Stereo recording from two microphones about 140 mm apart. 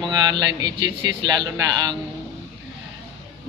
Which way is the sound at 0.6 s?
30° right (ahead or behind).